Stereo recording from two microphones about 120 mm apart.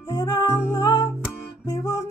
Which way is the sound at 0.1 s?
30° left (ahead or behind).